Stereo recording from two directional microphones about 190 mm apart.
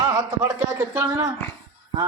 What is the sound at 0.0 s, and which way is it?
A man's voice, 15° right (ahead or behind).